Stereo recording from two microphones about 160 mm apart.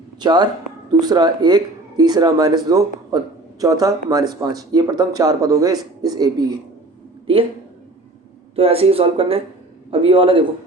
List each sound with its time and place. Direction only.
0.2 s speech: 25° right (ahead or behind)
8.5 s speech: 35° right (ahead or behind)